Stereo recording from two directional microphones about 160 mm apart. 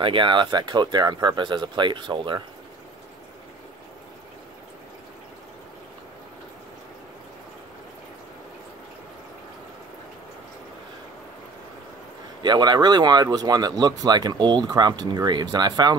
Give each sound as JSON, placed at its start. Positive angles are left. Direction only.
{"t": 0.0, "sound": "speech", "side_deg": -30}
{"t": 12.4, "sound": "speech", "side_deg": -25}